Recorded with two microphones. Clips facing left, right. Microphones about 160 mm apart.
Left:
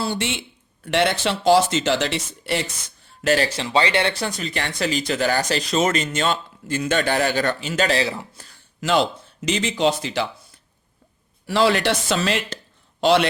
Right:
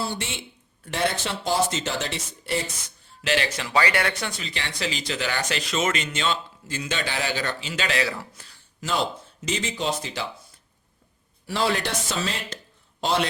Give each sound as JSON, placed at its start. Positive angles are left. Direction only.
{"t": 0.0, "sound": "speech", "side_deg": 80}
{"t": 3.2, "sound": "speech", "side_deg": 40}
{"t": 8.0, "sound": "speech", "side_deg": 20}
{"t": 8.8, "sound": "speech", "side_deg": 75}
{"t": 11.4, "sound": "a man's voice", "side_deg": 85}